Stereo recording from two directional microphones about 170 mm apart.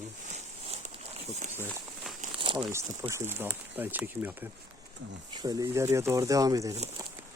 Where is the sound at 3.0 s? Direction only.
15° right (ahead or behind).